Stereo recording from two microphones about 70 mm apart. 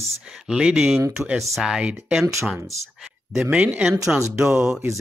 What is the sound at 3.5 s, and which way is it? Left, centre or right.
Speech, centre.